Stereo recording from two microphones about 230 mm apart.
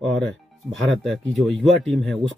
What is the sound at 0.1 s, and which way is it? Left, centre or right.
Speech, centre.